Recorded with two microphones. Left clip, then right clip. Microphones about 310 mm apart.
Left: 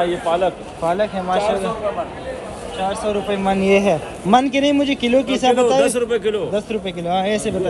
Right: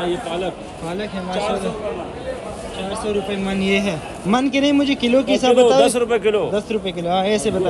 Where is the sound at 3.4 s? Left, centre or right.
Left.